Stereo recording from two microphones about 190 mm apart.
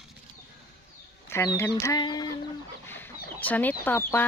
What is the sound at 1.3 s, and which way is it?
Speech, 15° left (ahead or behind).